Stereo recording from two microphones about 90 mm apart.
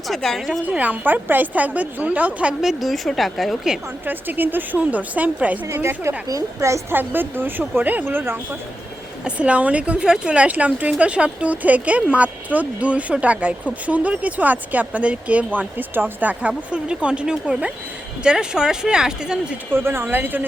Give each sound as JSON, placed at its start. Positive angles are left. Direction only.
{"t": 0.1, "sound": "a woman's voice", "side_deg": 5}
{"t": 0.6, "sound": "speech", "side_deg": -15}
{"t": 4.0, "sound": "speech", "side_deg": -20}
{"t": 5.7, "sound": "a woman's voice", "side_deg": -25}
{"t": 6.9, "sound": "speech", "side_deg": -20}
{"t": 9.2, "sound": "speech", "side_deg": -15}
{"t": 19.7, "sound": "speech", "side_deg": -25}